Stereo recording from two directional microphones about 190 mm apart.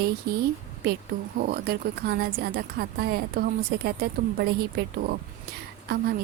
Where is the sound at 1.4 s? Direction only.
55° right (ahead or behind).